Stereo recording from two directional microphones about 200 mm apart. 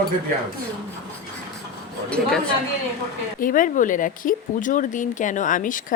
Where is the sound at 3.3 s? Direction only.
45° left (ahead or behind).